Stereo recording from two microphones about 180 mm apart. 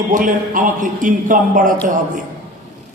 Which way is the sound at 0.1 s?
50° right (ahead or behind).